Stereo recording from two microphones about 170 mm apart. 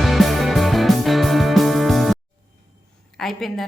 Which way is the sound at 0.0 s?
Centre (ahead or behind).